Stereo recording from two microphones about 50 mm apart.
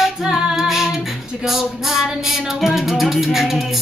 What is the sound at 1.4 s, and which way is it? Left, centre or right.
Music, centre.